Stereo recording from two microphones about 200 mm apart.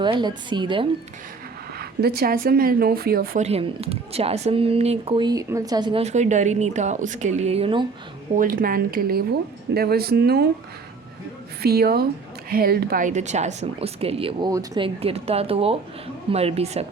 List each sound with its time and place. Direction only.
0.0 s speech: 20° right (ahead or behind)
1.8 s speech: 50° right (ahead or behind)
3.4 s speech: 30° right (ahead or behind)
8.4 s speech: 45° right (ahead or behind)
11.6 s speech: 50° right (ahead or behind); by 16.8 s 30° right (ahead or behind)